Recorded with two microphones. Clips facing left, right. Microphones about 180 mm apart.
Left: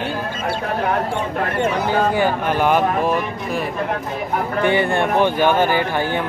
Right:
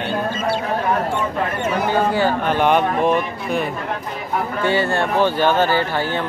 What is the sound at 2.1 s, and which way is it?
Speech, 15° left (ahead or behind).